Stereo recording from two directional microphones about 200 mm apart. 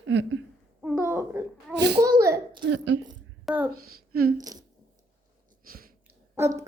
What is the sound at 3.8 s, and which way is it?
Speech, 50° right (ahead or behind).